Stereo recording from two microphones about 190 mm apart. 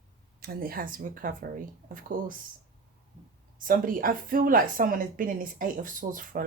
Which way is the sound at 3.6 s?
45° right (ahead or behind).